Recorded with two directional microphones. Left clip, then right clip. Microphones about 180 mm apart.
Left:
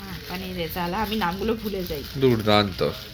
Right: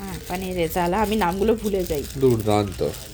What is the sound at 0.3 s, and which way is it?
Speech, 70° right (ahead or behind).